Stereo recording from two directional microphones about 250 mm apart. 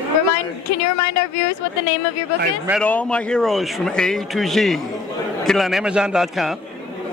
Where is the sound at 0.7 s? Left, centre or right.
Left.